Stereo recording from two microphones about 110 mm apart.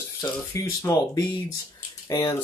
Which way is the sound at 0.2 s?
35° left (ahead or behind).